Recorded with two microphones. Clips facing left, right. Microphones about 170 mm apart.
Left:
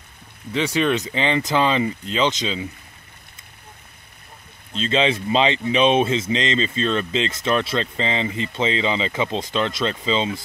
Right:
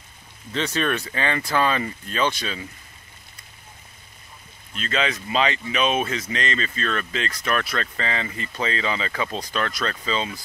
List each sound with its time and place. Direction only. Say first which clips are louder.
0.5 s speech: left 4 dB; 15° left (ahead or behind)
4.7 s speech: left 6 dB; 25° left (ahead or behind)